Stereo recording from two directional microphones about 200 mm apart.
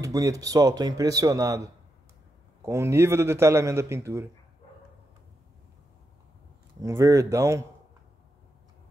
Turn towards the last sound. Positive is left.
turn(degrees=-15)  # may be behind; listen again after turning